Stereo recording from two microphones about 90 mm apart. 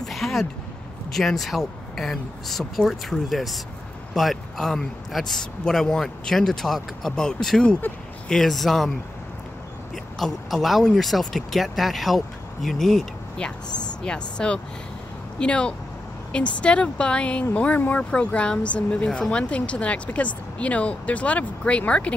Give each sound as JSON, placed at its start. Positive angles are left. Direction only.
{"t": 0.0, "sound": "a sound", "side_deg": 0}
{"t": 1.1, "sound": "a man's voice", "side_deg": 0}
{"t": 10.1, "sound": "a man's voice", "side_deg": 0}